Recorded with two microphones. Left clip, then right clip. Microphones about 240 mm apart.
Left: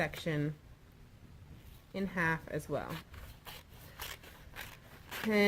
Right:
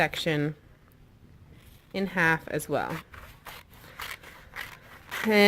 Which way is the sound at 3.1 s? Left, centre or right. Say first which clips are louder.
Right 7 dB; centre.